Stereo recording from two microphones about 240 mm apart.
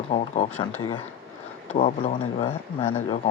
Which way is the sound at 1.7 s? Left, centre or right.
Left.